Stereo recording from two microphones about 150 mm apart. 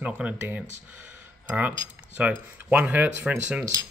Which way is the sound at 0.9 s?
10° right (ahead or behind).